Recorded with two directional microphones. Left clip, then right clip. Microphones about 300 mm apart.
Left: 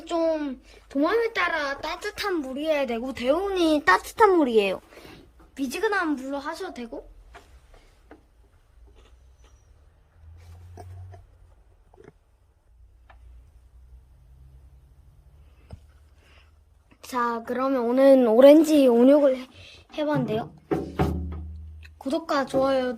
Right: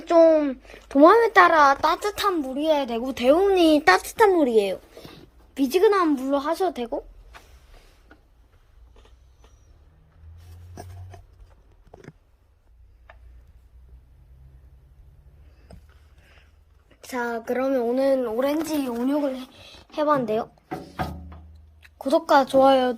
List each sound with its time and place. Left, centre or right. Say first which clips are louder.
0.2 s a child's voice: right 10 dB; centre
5.5 s a child's voice: right 7 dB; centre
17.0 s a woman's voice: left 2 dB; centre
18.0 s speech: left 6 dB; left
18.4 s speech: left 11 dB; centre
19.5 s a sound: right 4 dB; centre
21.8 s speech: right 7 dB; centre